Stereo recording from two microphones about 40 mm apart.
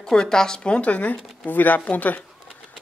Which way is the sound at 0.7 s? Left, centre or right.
Left.